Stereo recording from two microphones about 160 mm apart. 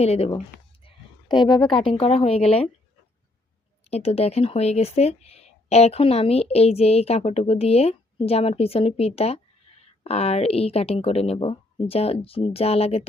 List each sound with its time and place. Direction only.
0.0 s speech: 40° left (ahead or behind)
1.3 s speech: 30° left (ahead or behind)
2.0 s speech: 40° left (ahead or behind)
3.8 s speech: 40° left (ahead or behind)